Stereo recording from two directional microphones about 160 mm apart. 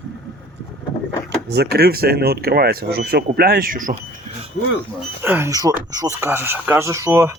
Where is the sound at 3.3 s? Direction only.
75° right (ahead or behind).